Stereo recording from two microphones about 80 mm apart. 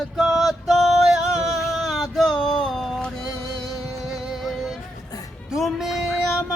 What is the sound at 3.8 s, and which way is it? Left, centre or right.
Music, centre.